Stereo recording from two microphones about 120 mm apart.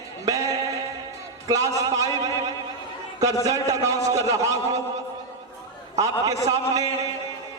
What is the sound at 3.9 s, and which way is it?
Speech, 30° right (ahead or behind).